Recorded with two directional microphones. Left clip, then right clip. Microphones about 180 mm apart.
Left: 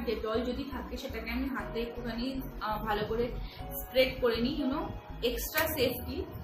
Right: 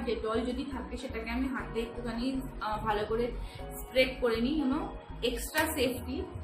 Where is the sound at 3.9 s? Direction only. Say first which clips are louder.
Even; 10° right (ahead or behind).